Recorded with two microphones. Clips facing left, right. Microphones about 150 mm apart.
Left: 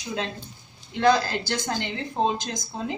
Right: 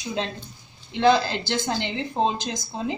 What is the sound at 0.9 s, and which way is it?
Speech, 25° right (ahead or behind).